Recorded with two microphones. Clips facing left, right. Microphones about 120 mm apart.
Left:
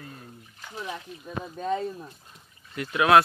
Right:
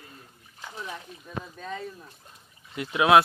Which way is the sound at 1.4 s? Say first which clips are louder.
Left 8 dB; 25° left (ahead or behind).